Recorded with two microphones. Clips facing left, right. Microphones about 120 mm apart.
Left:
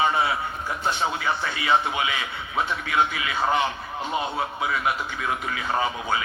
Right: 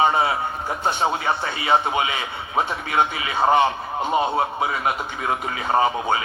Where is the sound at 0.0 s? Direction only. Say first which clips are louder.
Right 4 dB; 35° right (ahead or behind).